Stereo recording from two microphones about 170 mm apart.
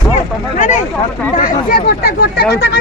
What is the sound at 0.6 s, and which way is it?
Speech, 45° left (ahead or behind).